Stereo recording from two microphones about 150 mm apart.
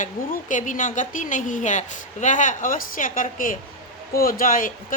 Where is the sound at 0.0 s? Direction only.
60° left (ahead or behind).